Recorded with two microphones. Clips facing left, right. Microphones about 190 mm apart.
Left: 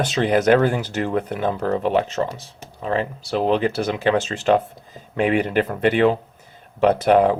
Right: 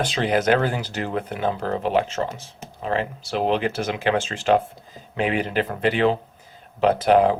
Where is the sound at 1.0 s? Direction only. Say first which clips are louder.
Left 2 dB; 45° left (ahead or behind).